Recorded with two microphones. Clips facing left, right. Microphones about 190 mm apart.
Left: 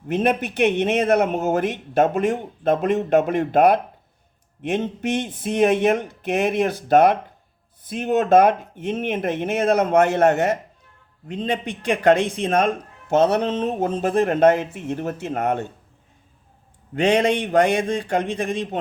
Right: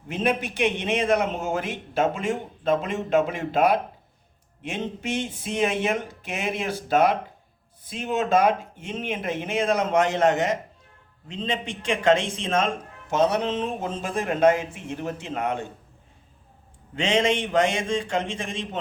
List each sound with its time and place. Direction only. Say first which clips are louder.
0.1 s speech: left 4 dB; 55° left (ahead or behind)
5.4 s speech: left 8 dB; 60° left (ahead or behind)
11.6 s speech: left 4 dB; 25° right (ahead or behind)
11.9 s speech: left 4 dB; 60° left (ahead or behind)
16.9 s speech: left 4 dB; 60° left (ahead or behind)